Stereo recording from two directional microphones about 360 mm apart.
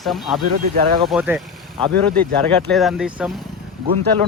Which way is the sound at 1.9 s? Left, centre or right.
Right.